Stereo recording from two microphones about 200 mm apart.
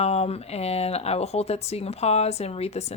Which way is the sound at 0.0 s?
30° left (ahead or behind).